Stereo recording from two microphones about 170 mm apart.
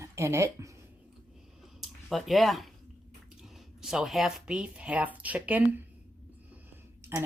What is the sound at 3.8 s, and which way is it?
Speech, 5° right (ahead or behind).